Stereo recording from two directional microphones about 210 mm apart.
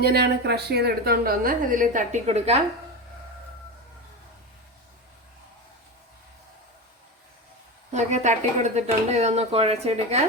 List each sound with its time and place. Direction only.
0.0 s a woman's voice: 50° right (ahead or behind); by 2.6 s 30° right (ahead or behind)
7.9 s speech: 35° right (ahead or behind)